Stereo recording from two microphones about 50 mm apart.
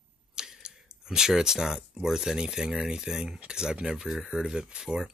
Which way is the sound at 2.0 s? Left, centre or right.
Centre.